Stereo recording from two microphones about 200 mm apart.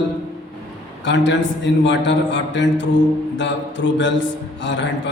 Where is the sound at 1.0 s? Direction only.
65° left (ahead or behind).